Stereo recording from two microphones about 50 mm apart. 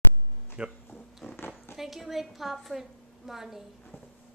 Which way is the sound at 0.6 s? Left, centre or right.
Right.